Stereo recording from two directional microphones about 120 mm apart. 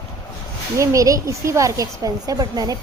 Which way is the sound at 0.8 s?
25° right (ahead or behind).